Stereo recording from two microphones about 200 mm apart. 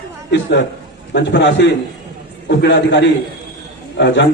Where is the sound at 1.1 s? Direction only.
60° left (ahead or behind).